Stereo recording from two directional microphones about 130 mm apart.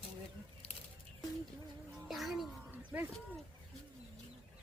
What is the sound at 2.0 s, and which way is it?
Speech, centre (ahead or behind).